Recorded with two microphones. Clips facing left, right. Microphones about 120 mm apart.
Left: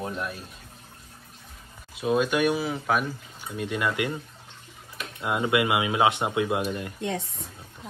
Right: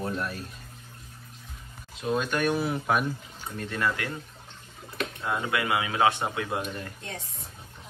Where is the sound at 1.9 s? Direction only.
10° left (ahead or behind).